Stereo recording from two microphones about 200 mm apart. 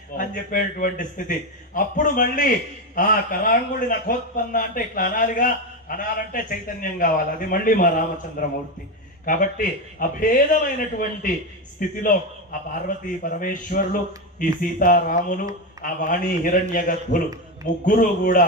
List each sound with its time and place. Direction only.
0.2 s a man's voice: 45° left (ahead or behind)